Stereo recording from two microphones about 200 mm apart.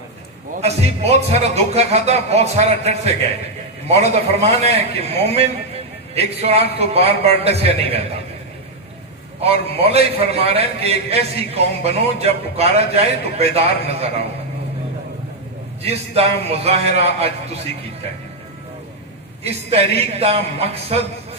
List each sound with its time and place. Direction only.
0.6 s a man's voice: 30° right (ahead or behind)
9.4 s a man's voice: 30° right (ahead or behind)
15.8 s a man's voice: 30° right (ahead or behind)
19.4 s a man's voice: 30° right (ahead or behind)